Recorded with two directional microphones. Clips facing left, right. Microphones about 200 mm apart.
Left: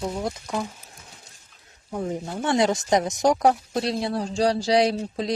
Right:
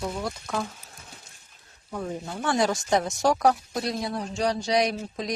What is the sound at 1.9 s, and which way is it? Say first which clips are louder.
Speech: left 4 dB; 20° left (ahead or behind).